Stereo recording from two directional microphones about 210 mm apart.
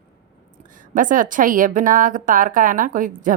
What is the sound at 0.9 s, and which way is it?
A woman's voice, 40° right (ahead or behind).